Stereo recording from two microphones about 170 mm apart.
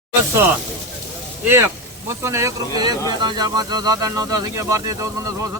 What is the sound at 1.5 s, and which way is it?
Speech, 15° right (ahead or behind).